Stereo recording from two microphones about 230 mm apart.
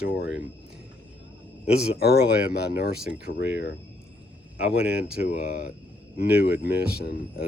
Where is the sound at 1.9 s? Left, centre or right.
Left.